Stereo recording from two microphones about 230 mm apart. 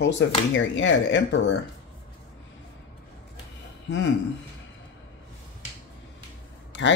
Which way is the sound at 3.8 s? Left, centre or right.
Left.